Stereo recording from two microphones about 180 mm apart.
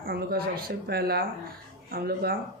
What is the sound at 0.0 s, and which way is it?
Speech, 55° right (ahead or behind).